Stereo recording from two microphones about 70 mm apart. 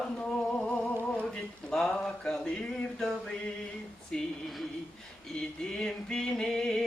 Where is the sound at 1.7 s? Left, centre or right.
Centre.